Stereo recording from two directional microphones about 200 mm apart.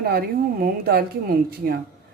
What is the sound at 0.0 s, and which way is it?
A woman's voice, 50° right (ahead or behind).